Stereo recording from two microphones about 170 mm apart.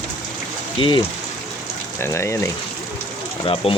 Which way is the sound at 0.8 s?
30° left (ahead or behind).